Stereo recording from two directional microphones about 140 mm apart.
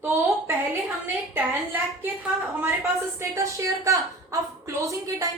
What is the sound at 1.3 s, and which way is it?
A woman's voice, 15° right (ahead or behind).